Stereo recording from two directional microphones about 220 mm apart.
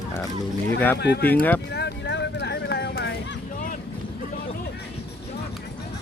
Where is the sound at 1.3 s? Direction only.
10° left (ahead or behind).